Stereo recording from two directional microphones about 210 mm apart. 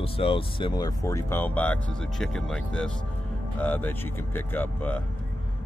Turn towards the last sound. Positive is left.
turn(degrees=10)  # may be behind; listen again after turning